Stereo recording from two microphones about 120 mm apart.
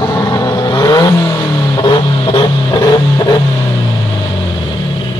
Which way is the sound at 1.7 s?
45° left (ahead or behind).